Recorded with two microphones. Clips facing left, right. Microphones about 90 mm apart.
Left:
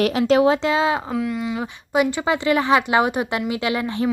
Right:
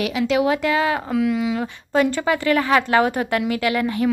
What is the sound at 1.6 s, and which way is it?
Speech, 15° left (ahead or behind).